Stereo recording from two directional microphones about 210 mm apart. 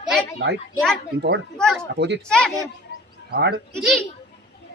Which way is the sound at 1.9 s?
55° right (ahead or behind).